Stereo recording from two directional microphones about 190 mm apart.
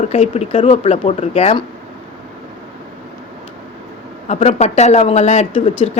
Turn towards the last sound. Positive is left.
turn(degrees=30)  # may be behind; listen again after turning